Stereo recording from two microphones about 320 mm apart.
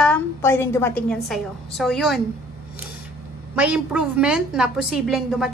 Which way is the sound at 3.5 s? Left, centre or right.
Centre.